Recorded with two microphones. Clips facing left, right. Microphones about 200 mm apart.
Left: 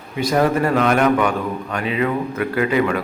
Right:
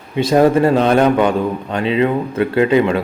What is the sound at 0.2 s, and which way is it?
A man's voice, 30° right (ahead or behind).